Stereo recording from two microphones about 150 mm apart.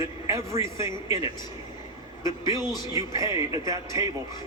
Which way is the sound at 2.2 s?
20° right (ahead or behind).